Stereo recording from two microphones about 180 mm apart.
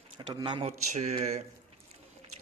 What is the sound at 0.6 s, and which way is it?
Speech, 40° right (ahead or behind).